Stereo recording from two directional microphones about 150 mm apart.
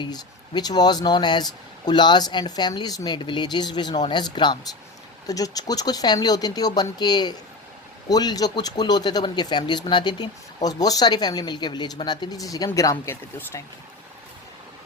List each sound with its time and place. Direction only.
0.0 s speech: 30° left (ahead or behind)